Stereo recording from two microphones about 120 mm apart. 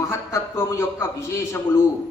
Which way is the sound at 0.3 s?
25° left (ahead or behind).